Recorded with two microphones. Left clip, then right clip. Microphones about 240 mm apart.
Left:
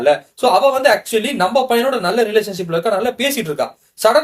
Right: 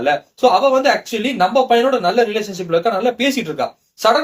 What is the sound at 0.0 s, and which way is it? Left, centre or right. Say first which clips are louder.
Speech: left 1 dB; left.